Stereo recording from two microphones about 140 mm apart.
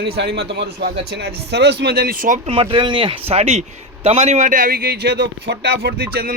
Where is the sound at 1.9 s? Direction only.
90° right.